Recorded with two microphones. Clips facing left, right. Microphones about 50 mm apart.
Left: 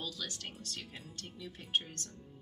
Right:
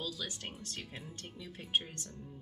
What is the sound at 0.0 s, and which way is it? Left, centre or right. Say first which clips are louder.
Music: right 1 dB; centre.